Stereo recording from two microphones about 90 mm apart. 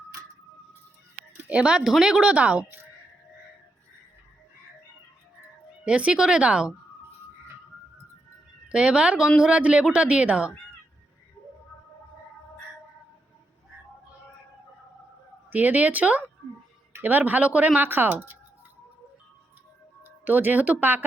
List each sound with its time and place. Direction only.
1.5 s speech: 10° right (ahead or behind)
5.8 s speech: 15° right (ahead or behind)
8.7 s speech: 10° right (ahead or behind)
15.4 s speech: 20° right (ahead or behind)
20.1 s speech: 20° right (ahead or behind)